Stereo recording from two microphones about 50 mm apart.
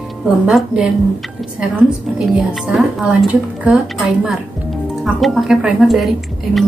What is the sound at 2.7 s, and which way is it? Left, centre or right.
Speech, centre.